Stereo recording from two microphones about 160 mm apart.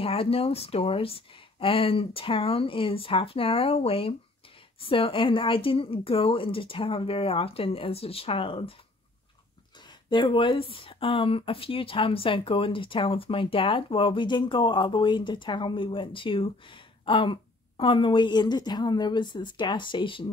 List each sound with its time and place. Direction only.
0.0 s speech: 35° left (ahead or behind)
9.8 s speech: 30° left (ahead or behind)